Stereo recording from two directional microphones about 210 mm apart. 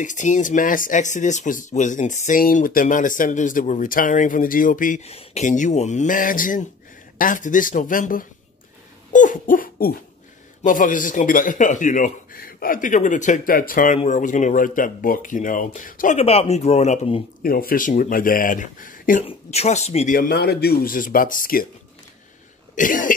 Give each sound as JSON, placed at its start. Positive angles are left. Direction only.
{"t": 0.0, "sound": "speech", "side_deg": 35}
{"t": 9.1, "sound": "hoot", "side_deg": 40}
{"t": 10.6, "sound": "speech", "side_deg": 40}
{"t": 17.4, "sound": "speech", "side_deg": 45}
{"t": 19.2, "sound": "speech", "side_deg": 30}
{"t": 20.2, "sound": "speech", "side_deg": 45}
{"t": 22.8, "sound": "speech", "side_deg": 40}